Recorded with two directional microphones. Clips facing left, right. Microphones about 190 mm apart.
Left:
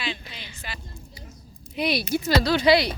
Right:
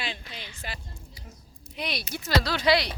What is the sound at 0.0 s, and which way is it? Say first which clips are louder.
Speech: left 3 dB; 50° right (ahead or behind).